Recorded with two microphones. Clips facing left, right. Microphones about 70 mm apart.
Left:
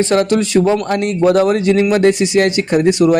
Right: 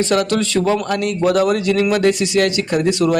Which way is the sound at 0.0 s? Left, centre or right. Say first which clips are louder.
Left 3 dB; left.